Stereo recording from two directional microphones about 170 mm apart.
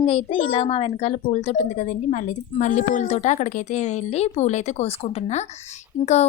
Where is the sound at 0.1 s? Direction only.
35° left (ahead or behind).